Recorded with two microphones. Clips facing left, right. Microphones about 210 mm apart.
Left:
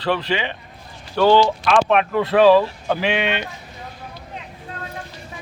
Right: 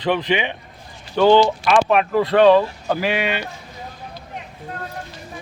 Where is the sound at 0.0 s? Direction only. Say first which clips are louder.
Right 2 dB; 20° right (ahead or behind).